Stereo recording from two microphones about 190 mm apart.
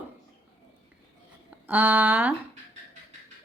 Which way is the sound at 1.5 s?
10° right (ahead or behind).